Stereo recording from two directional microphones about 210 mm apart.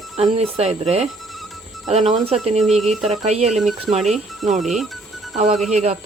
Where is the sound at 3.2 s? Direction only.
30° right (ahead or behind).